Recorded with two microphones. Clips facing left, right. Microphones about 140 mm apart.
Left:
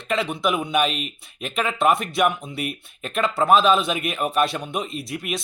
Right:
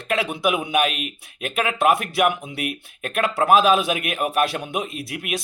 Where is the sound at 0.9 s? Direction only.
60° right (ahead or behind).